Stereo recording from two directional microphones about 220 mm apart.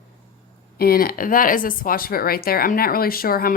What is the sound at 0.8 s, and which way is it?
Speech, 45° left (ahead or behind).